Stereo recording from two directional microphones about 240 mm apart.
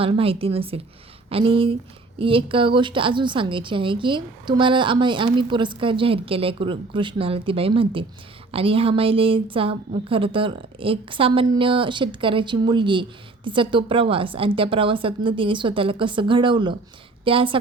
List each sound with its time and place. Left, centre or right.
0.0 s a woman's voice: right